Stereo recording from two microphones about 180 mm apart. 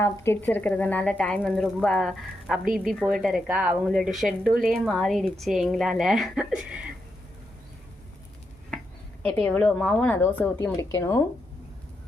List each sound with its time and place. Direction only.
0.0 s a woman's voice: 15° left (ahead or behind); by 6.9 s 5° right (ahead or behind)
9.2 s a woman's voice: 5° left (ahead or behind)